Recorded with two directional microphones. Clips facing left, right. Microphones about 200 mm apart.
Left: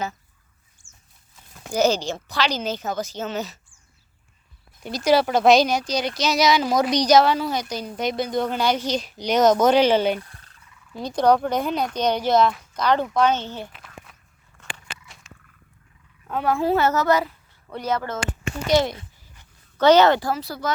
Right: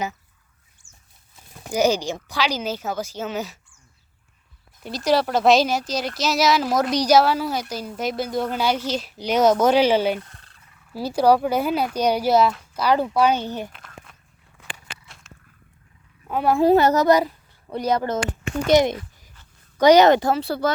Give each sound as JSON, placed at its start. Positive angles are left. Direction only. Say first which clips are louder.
{"t": 1.7, "sound": "speech", "louder": "even", "side_deg": -10}
{"t": 4.8, "sound": "speech", "louder": "left 2 dB", "side_deg": 0}
{"t": 13.7, "sound": "a sound", "louder": "even", "side_deg": 5}
{"t": 16.2, "sound": "speech", "louder": "right 4 dB", "side_deg": -15}